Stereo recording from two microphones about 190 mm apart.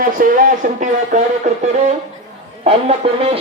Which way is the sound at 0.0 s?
45° right (ahead or behind).